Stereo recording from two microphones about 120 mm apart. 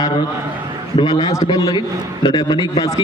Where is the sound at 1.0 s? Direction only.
35° left (ahead or behind).